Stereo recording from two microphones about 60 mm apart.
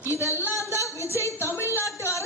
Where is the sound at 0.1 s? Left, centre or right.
Left.